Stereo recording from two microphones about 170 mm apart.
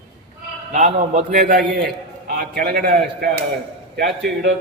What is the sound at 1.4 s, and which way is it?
A man's voice, 65° right (ahead or behind).